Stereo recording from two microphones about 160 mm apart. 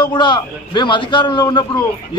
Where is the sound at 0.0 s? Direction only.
30° left (ahead or behind).